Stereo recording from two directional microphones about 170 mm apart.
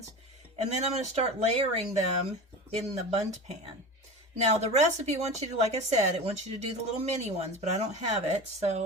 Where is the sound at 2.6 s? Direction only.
40° right (ahead or behind).